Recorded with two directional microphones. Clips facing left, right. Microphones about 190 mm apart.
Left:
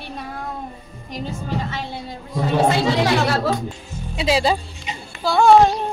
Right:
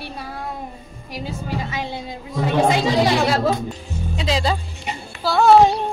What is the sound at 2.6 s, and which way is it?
Speech, 15° right (ahead or behind).